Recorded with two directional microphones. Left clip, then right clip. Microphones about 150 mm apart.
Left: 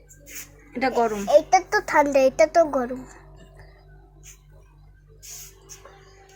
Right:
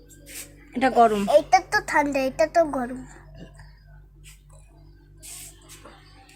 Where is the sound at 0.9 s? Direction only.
45° right (ahead or behind).